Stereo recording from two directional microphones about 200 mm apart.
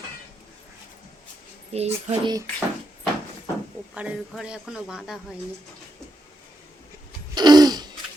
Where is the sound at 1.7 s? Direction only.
30° right (ahead or behind).